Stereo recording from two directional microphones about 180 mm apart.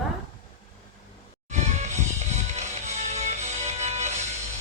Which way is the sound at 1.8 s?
40° right (ahead or behind).